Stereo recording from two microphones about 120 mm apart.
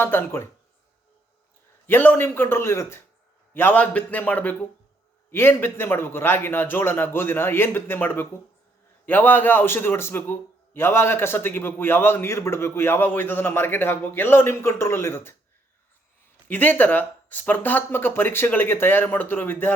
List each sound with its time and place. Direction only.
0.0 s a man's voice: 20° left (ahead or behind)
1.9 s a man's voice: 15° left (ahead or behind)
16.5 s speech: 15° left (ahead or behind)